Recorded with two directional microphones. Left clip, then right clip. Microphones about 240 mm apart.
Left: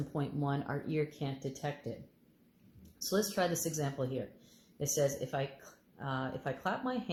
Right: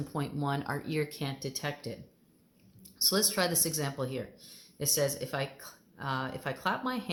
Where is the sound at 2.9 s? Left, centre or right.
Right.